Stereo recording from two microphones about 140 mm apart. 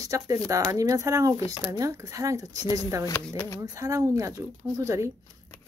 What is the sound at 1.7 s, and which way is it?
Speech, 25° right (ahead or behind).